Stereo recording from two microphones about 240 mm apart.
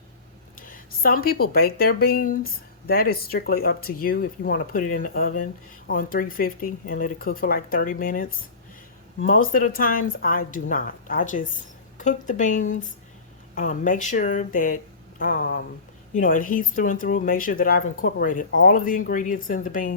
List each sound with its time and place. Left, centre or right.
0.6 s speech: left